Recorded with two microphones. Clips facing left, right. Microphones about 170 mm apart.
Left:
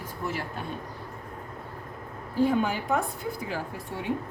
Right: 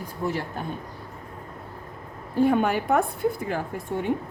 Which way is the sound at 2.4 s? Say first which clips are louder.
Right 4 dB; 60° right (ahead or behind).